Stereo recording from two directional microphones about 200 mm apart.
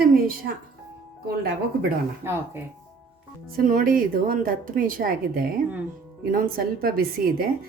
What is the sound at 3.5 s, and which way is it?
Speech, 45° right (ahead or behind).